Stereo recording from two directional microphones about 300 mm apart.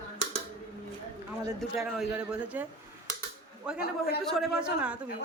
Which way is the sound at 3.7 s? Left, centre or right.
Left.